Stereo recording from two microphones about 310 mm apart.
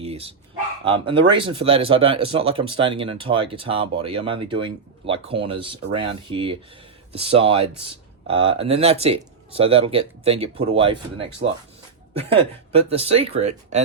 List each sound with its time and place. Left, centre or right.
0.0 s bow-wow: centre
0.9 s speech: centre
12.7 s speech: centre